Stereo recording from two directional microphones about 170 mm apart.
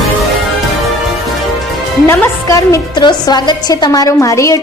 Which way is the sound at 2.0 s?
15° left (ahead or behind).